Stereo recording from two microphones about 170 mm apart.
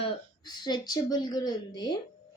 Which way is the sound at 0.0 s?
25° left (ahead or behind).